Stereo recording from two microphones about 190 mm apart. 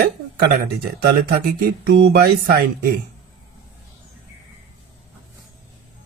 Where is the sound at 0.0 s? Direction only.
55° right (ahead or behind).